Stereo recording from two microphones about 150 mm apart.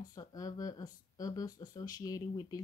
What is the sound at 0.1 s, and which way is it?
Speech, 25° left (ahead or behind).